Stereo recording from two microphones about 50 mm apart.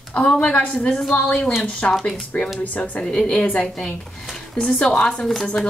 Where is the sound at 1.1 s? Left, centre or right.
Left.